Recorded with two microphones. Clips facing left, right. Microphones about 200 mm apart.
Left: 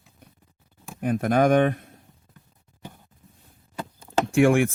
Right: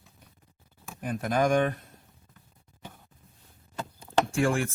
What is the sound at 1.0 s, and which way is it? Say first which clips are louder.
Speech: left 6 dB; 60° left (ahead or behind).